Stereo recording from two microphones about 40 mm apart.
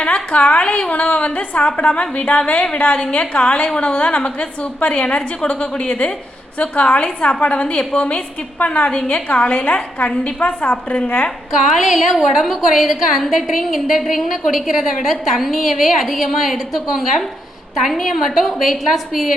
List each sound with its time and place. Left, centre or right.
0.0 s a woman's voice: left
6.6 s a woman's voice: left
11.5 s a woman's voice: centre